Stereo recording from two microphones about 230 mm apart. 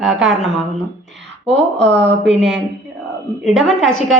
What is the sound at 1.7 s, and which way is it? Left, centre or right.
Speech, right.